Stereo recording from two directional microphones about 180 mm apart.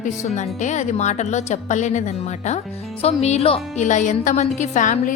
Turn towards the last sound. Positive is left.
turn(degrees=45)  # may be behind; listen again after turning